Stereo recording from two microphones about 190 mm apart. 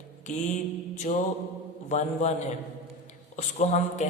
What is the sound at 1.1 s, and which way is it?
A man's voice, 35° left (ahead or behind).